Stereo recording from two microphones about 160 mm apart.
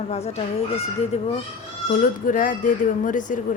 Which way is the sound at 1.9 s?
55° left (ahead or behind).